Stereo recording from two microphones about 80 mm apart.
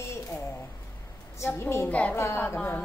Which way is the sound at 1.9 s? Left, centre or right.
Centre.